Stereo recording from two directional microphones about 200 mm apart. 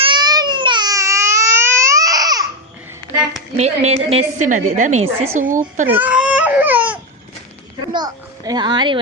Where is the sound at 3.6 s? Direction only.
30° right (ahead or behind).